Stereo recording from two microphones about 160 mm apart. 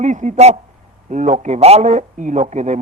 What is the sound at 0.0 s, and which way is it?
Speech, 50° right (ahead or behind).